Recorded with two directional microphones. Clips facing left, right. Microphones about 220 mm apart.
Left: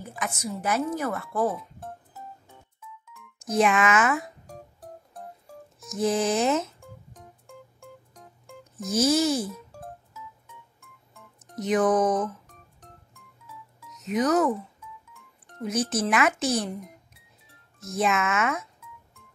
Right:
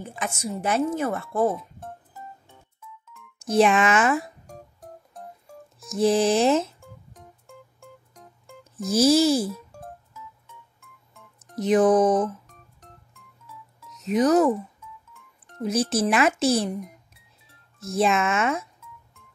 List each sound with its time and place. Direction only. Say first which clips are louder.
0.0 s a woman's voice: right 2 dB; 25° right (ahead or behind)
1.5 s music: right 3 dB; centre (ahead or behind)
3.4 s a child's voice: right 3 dB; 30° right (ahead or behind)
5.9 s a child's voice: right 4 dB; 30° right (ahead or behind)
6.8 s music: even; centre (ahead or behind)
8.8 s a child's voice: right 4 dB; 30° right (ahead or behind)
9.5 s music: right 3 dB; centre (ahead or behind)
11.6 s a child's voice: right 4 dB; 30° right (ahead or behind)
14.0 s a child's voice: right 4 dB; 30° right (ahead or behind)
15.6 s a child's voice: right 3 dB; 30° right (ahead or behind)
17.9 s a child's voice: right 3 dB; 30° right (ahead or behind)